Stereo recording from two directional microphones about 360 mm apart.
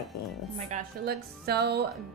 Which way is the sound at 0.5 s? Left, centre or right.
Right.